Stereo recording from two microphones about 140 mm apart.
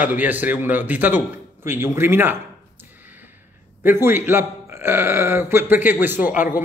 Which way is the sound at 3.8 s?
15° right (ahead or behind).